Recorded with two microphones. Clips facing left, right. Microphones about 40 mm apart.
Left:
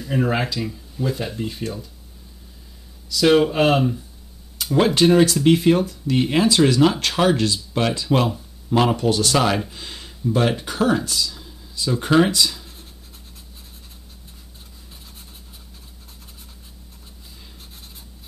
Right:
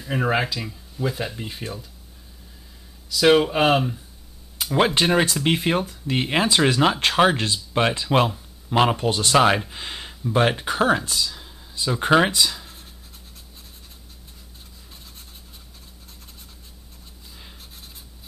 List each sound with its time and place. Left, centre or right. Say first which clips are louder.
0.0 s speech: left 1 dB; centre
3.1 s speech: left 1 dB; centre
4.7 s speech: left 4 dB; right
12.4 s writing: even; centre